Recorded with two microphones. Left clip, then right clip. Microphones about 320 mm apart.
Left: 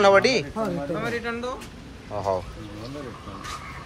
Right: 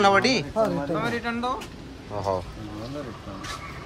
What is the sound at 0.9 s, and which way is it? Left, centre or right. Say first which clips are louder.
Speech: right 1 dB; right.